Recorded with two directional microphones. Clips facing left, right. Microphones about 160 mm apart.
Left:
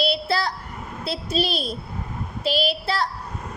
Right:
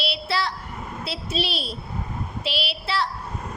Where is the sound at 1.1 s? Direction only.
40° left (ahead or behind).